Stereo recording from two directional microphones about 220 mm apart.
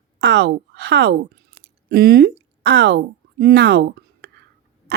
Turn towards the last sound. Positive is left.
turn(degrees=-50)  # may be behind; listen again after turning